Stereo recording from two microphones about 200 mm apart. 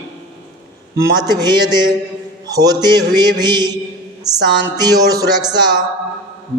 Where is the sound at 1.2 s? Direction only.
20° right (ahead or behind).